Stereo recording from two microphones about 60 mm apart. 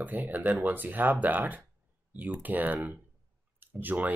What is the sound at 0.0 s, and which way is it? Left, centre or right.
Speech, right.